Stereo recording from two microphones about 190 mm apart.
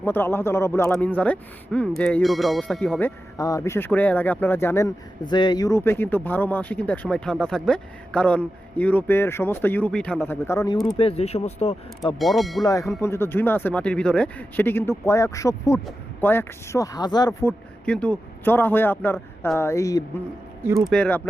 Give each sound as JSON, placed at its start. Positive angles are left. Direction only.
{"t": 0.0, "sound": "speech", "side_deg": 10}
{"t": 3.3, "sound": "speech", "side_deg": 20}
{"t": 5.2, "sound": "speech", "side_deg": 25}
{"t": 10.9, "sound": "speech", "side_deg": 30}
{"t": 12.2, "sound": "speech", "side_deg": 0}
{"t": 12.6, "sound": "speech", "side_deg": 15}
{"t": 17.8, "sound": "speech", "side_deg": 5}
{"t": 20.8, "sound": "speech", "side_deg": 5}